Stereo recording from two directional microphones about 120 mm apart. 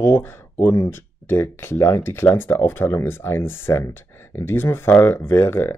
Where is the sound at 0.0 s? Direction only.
20° left (ahead or behind).